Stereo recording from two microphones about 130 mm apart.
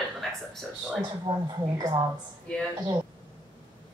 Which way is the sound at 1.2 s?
30° right (ahead or behind).